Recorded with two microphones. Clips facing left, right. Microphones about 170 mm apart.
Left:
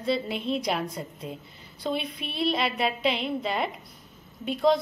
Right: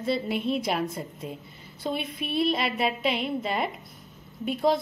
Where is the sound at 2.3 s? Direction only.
Centre (ahead or behind).